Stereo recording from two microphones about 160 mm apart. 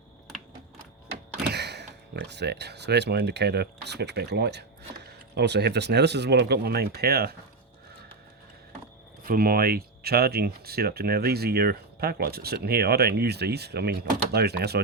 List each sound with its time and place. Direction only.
1.4 s speech: 90° right
9.2 s speech: 65° right (ahead or behind); by 14.8 s 90° right